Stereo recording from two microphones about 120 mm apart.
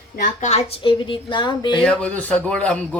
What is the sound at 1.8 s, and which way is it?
Speech, 10° left (ahead or behind).